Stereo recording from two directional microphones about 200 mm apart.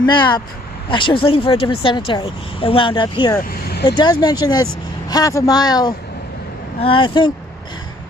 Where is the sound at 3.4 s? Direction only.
55° left (ahead or behind).